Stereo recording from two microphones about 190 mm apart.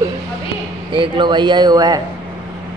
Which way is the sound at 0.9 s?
25° right (ahead or behind).